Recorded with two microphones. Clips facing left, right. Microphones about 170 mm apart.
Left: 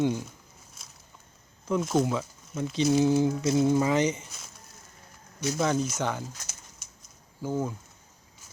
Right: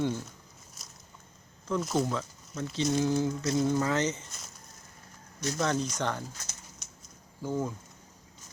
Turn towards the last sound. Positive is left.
turn(degrees=0)  # may be behind; listen again after turning